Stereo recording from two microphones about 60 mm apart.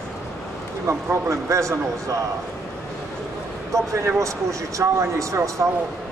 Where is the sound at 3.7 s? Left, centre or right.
Right.